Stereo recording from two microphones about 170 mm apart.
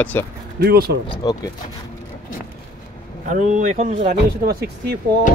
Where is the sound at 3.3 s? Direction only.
45° right (ahead or behind).